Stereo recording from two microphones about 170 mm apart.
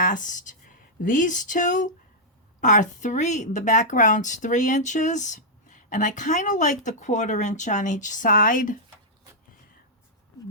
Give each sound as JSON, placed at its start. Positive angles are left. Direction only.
{"t": 0.0, "sound": "speech", "side_deg": 50}